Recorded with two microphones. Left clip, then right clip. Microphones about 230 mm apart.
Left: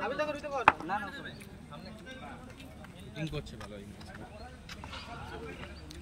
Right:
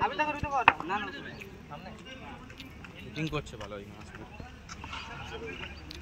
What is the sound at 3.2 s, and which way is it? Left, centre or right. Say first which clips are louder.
Speech: right 5 dB; centre.